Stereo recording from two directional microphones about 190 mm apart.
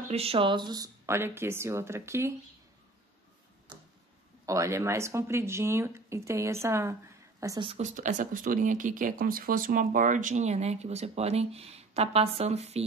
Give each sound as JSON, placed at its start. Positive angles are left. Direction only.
{"t": 0.1, "sound": "speech", "side_deg": -30}
{"t": 4.5, "sound": "speech", "side_deg": -15}
{"t": 7.6, "sound": "speech", "side_deg": -35}